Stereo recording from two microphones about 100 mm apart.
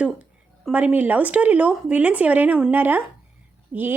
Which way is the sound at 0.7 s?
15° right (ahead or behind).